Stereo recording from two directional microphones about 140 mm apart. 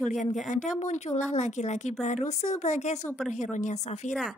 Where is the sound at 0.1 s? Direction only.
60° left (ahead or behind).